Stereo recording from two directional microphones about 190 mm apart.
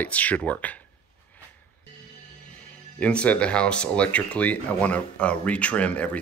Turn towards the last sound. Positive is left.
turn(degrees=5)  # may be behind; listen again after turning